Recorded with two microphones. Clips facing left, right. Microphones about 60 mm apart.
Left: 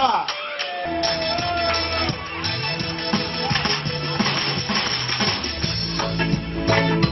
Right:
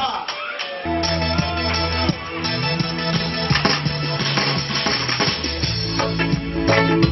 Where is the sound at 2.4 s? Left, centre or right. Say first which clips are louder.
Right 4 dB; right.